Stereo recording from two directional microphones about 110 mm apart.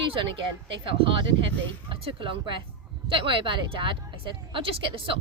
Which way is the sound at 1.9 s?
55° right (ahead or behind).